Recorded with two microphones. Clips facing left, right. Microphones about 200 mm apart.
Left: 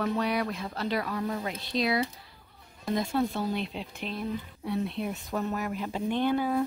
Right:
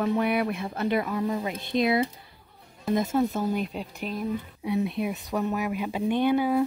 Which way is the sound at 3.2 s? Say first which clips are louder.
Right 3 dB; 15° right (ahead or behind).